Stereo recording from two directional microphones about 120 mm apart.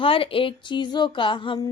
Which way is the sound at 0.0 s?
50° left (ahead or behind).